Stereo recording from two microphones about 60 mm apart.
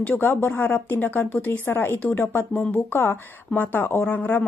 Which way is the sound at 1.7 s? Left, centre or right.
Left.